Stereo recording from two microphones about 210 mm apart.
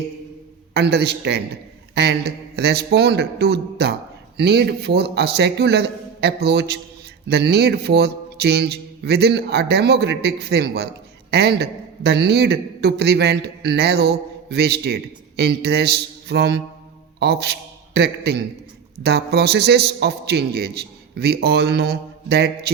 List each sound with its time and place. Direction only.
0.7 s a man's voice: 50° right (ahead or behind)